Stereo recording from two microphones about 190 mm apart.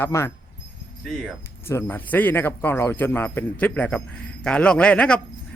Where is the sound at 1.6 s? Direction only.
10° left (ahead or behind).